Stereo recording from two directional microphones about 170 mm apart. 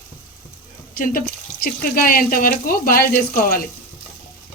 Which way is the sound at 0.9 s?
60° left (ahead or behind).